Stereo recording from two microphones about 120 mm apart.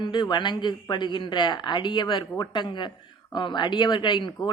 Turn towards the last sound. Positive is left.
turn(degrees=40)  # may be behind; listen again after turning